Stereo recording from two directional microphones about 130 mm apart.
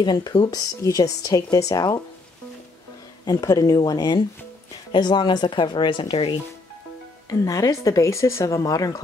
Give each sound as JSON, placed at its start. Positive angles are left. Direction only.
{"t": 0.0, "sound": "speech", "side_deg": 35}
{"t": 3.3, "sound": "speech", "side_deg": 30}
{"t": 7.2, "sound": "speech", "side_deg": 25}